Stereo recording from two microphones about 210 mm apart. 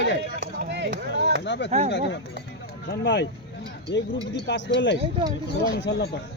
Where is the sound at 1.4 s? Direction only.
55° left (ahead or behind).